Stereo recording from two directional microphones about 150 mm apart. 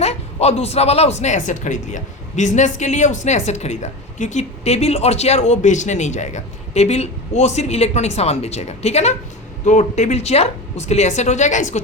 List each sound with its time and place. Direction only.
0.0 s speech: 45° left (ahead or behind)